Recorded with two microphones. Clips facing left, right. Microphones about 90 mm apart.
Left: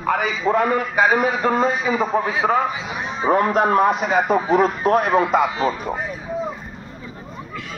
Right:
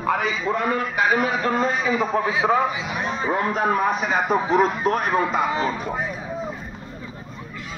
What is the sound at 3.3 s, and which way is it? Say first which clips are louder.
Speech: left 6 dB; 65° left (ahead or behind).